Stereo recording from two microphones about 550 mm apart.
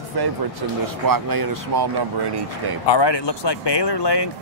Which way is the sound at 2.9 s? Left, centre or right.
Left.